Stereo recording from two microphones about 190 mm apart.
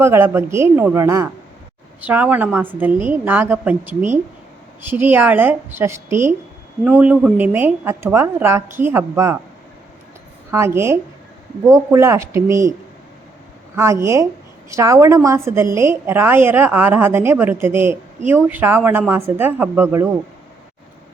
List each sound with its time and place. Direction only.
0.0 s a woman's voice: 15° right (ahead or behind)
10.5 s a woman's voice: 15° right (ahead or behind)
13.7 s a woman's voice: 15° right (ahead or behind)